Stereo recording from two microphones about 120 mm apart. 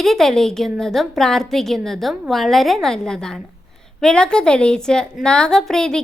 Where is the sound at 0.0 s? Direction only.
Centre (ahead or behind).